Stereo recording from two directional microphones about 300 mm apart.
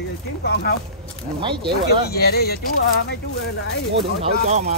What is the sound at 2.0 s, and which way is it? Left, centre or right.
Speech, left.